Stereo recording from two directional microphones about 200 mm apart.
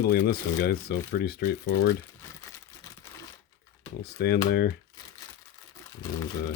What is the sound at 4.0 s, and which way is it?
Speech, 50° left (ahead or behind).